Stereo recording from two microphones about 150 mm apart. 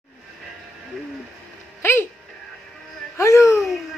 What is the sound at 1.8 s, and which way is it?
Music, 15° left (ahead or behind).